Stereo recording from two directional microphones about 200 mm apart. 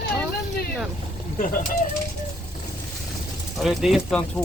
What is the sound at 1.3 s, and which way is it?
Speech, 45° left (ahead or behind).